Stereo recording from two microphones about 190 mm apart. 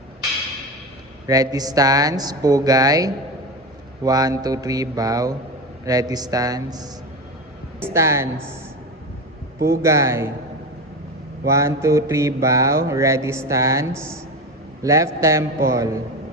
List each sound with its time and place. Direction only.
1.3 s speech: 20° right (ahead or behind)
7.8 s mantra: 15° right (ahead or behind)
9.6 s speech: 55° right (ahead or behind)
9.8 s mantra: 15° right (ahead or behind)
11.4 s mantra: 15° right (ahead or behind)